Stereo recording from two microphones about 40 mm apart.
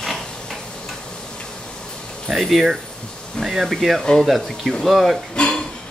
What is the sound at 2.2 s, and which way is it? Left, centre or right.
Speech, centre.